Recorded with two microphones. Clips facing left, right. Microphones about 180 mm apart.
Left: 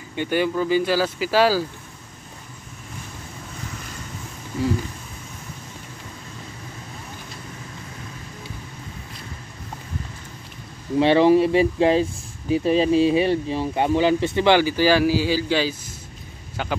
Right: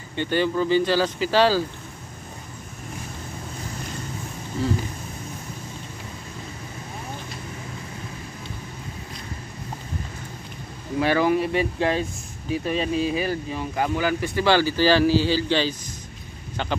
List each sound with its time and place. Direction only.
0.1 s speech: 10° left (ahead or behind)
11.0 s speech: 25° left (ahead or behind); by 15.7 s 10° left (ahead or behind)